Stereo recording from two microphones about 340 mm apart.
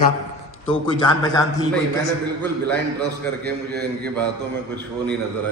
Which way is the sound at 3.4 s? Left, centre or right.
Right.